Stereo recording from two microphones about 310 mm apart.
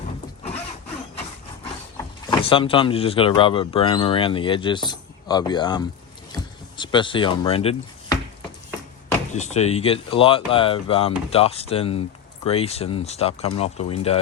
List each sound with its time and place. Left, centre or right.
2.2 s speech: centre
6.3 s a sound: centre
9.3 s speech: left